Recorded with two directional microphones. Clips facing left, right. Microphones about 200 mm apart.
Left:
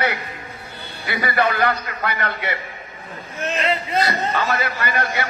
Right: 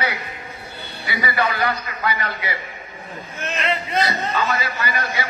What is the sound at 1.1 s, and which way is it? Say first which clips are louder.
A man's voice: left 2 dB; 55° left (ahead or behind).